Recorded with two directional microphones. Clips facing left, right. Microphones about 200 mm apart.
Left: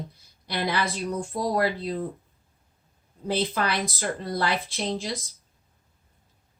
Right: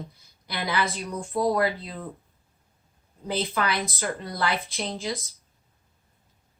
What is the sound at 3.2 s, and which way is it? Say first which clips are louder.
A woman's voice: left 1 dB; 35° left (ahead or behind).